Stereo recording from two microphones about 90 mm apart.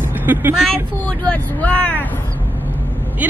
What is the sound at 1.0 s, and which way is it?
Speech, 15° left (ahead or behind).